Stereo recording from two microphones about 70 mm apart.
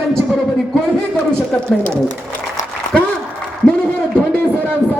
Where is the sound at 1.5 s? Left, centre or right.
Centre.